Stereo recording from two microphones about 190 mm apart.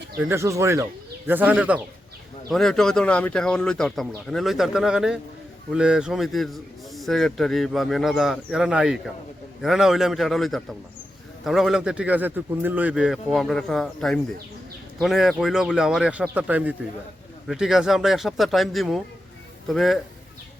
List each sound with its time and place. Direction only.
0.2 s a man's voice: 15° right (ahead or behind)